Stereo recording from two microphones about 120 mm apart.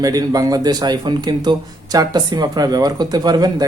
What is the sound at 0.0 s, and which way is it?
A man's voice, 30° right (ahead or behind).